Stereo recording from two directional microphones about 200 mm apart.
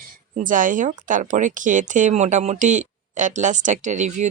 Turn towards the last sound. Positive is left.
turn(degrees=-35)  # may be behind; listen again after turning